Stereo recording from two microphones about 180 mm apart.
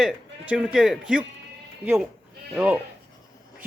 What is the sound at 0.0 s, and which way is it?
A man's voice, 5° right (ahead or behind).